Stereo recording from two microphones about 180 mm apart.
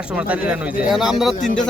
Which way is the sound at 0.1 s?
5° right (ahead or behind).